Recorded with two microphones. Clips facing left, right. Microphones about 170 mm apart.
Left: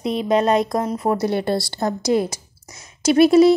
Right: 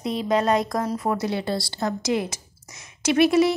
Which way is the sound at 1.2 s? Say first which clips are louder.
Left 5 dB; 55° left (ahead or behind).